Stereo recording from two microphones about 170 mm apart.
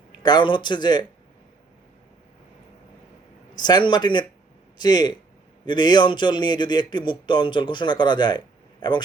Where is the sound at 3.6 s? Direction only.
25° left (ahead or behind).